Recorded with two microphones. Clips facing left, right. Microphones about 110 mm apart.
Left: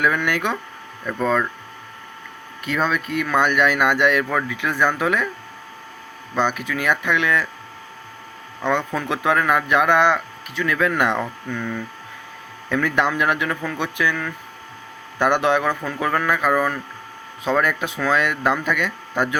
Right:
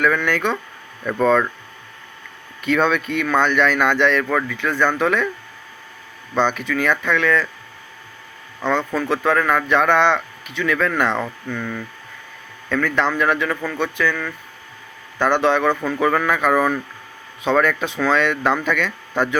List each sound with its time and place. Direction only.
0.0 s speech: 10° left (ahead or behind)
1.0 s speech: centre (ahead or behind)
2.6 s speech: centre (ahead or behind)
6.3 s speech: 5° left (ahead or behind)
8.9 s speech: 10° left (ahead or behind)
15.8 s speech: centre (ahead or behind)